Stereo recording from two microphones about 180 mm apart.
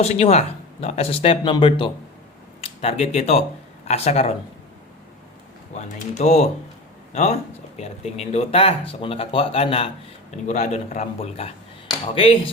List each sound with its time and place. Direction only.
0.0 s speech: 35° left (ahead or behind)
5.7 s speech: 40° left (ahead or behind)